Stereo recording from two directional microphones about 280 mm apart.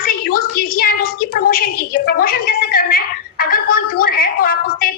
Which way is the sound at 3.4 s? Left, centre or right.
Left.